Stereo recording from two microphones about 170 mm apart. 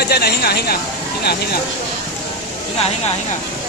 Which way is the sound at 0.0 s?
70° left (ahead or behind).